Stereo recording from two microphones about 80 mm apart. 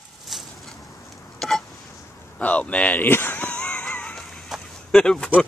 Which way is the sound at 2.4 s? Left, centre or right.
Centre.